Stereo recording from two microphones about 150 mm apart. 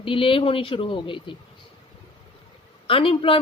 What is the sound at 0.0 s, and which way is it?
Speech, 35° left (ahead or behind).